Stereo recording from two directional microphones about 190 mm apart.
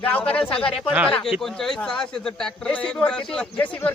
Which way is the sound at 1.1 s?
5° left (ahead or behind).